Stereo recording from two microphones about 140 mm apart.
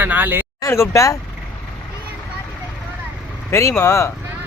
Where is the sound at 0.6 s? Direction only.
20° left (ahead or behind).